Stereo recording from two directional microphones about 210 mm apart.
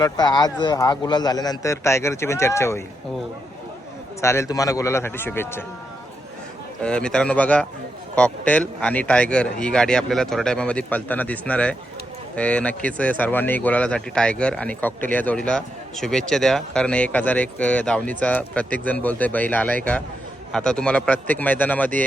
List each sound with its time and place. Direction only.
0.0 s a man's voice: 20° left (ahead or behind)
4.2 s a man's voice: 15° left (ahead or behind)
6.8 s a man's voice: 5° left (ahead or behind)